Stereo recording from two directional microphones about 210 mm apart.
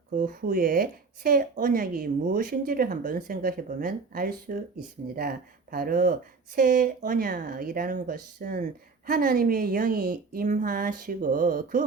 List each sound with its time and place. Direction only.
0.1 s speech: 40° right (ahead or behind)